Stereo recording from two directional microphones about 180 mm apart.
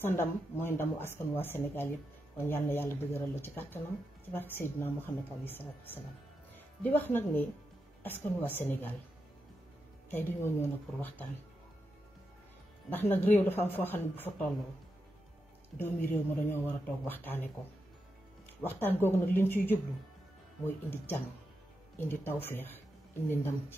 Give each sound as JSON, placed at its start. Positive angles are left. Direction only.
{"t": 0.0, "sound": "speech", "side_deg": 15}
{"t": 6.8, "sound": "speech", "side_deg": 10}
{"t": 10.0, "sound": "speech", "side_deg": 10}
{"t": 12.9, "sound": "speech", "side_deg": 10}
{"t": 15.8, "sound": "speech", "side_deg": 10}
{"t": 18.6, "sound": "speech", "side_deg": 10}